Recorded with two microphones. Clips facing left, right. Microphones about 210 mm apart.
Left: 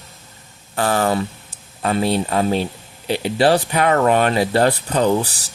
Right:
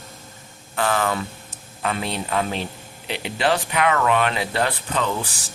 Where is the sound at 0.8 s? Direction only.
35° left (ahead or behind).